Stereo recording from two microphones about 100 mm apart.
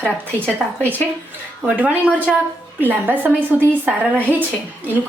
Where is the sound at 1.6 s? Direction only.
15° right (ahead or behind).